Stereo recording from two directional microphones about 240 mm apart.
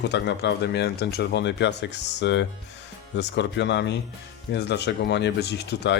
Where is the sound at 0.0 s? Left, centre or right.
Left.